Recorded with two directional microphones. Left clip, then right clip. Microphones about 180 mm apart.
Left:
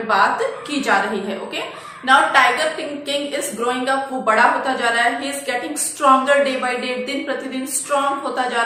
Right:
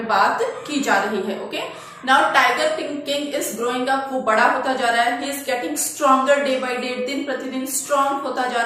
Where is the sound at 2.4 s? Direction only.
5° left (ahead or behind).